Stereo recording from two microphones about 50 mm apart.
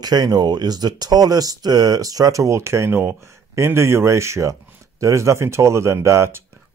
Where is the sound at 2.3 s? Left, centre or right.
Right.